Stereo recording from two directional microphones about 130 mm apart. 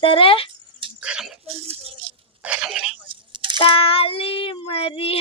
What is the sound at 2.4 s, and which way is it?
Throat clearing, 5° right (ahead or behind).